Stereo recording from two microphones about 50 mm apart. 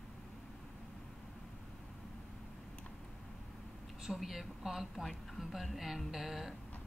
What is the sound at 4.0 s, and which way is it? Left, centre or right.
A woman's voice, centre.